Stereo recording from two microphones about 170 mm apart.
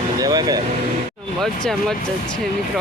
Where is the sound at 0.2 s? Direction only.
20° right (ahead or behind).